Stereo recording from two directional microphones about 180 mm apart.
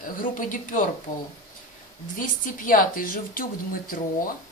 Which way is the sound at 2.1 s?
50° left (ahead or behind).